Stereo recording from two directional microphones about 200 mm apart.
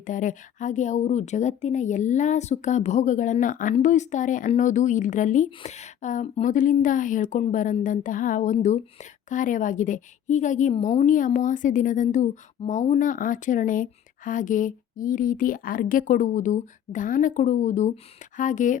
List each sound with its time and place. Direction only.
0.0 s speech: 40° left (ahead or behind)